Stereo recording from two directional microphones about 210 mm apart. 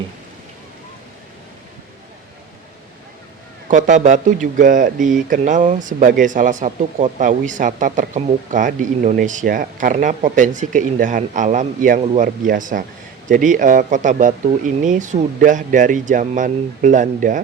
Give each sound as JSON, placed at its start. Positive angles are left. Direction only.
{"t": 3.7, "sound": "speech", "side_deg": -35}